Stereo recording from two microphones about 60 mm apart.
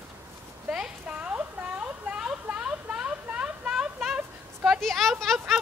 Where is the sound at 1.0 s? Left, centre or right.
Right.